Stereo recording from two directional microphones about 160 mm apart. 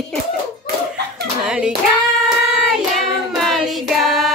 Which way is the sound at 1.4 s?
5° right (ahead or behind).